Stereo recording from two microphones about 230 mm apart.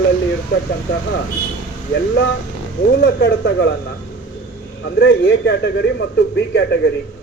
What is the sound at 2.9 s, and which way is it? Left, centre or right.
Speech, left.